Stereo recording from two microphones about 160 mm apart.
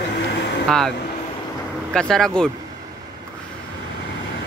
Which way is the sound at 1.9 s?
5° left (ahead or behind).